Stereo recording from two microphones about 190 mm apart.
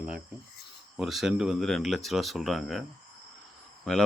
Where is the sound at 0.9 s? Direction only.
Centre (ahead or behind).